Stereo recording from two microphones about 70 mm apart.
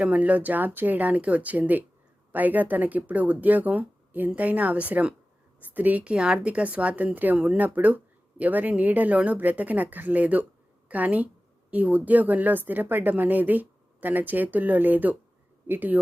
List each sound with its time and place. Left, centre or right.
0.0 s a woman's voice: right